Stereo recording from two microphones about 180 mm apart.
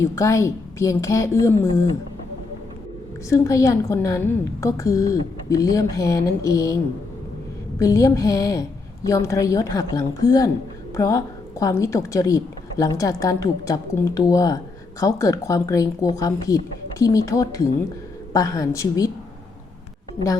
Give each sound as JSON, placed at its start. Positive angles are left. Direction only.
{"t": 0.0, "sound": "a woman's voice", "side_deg": 15}
{"t": 3.2, "sound": "a woman's voice", "side_deg": 15}
{"t": 7.8, "sound": "a woman's voice", "side_deg": 20}